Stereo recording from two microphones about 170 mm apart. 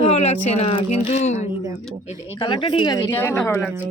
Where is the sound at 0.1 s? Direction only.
40° left (ahead or behind).